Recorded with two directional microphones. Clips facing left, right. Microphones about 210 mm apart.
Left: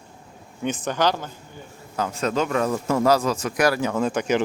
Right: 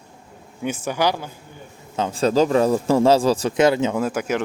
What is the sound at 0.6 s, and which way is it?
Speech, 10° right (ahead or behind).